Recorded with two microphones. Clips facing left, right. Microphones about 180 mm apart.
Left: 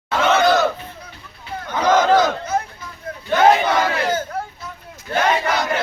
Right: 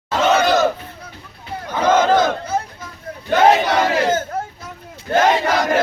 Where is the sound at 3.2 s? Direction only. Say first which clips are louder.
Right 1 dB; 40° right (ahead or behind).